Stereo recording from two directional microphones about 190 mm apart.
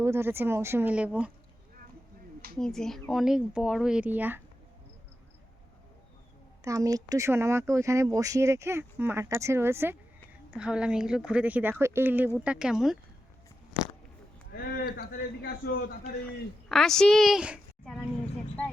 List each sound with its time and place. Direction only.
0.0 s speech: 15° right (ahead or behind)
2.6 s speech: 5° left (ahead or behind)
6.7 s speech: 20° right (ahead or behind); by 13.0 s centre (ahead or behind)
14.5 s a man's voice: 55° left (ahead or behind)
16.6 s speech: centre (ahead or behind)